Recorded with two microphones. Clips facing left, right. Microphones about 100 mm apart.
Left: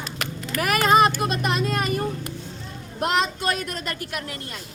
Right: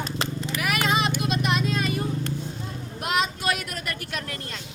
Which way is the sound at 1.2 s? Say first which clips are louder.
Left 1 dB; 40° left (ahead or behind).